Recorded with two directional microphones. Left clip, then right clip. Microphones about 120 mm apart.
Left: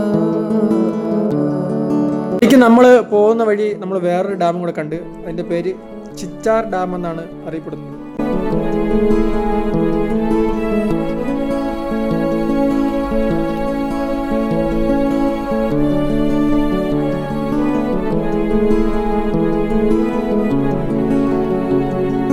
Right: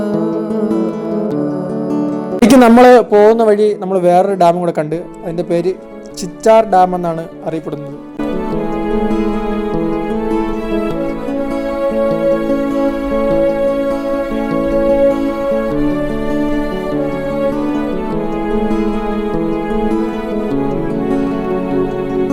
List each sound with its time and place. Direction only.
0.1 s music: centre (ahead or behind)
2.4 s speech: 25° right (ahead or behind)
8.9 s music: centre (ahead or behind)
12.3 s music: centre (ahead or behind)
14.8 s music: centre (ahead or behind)
16.3 s music: centre (ahead or behind)
19.9 s music: centre (ahead or behind)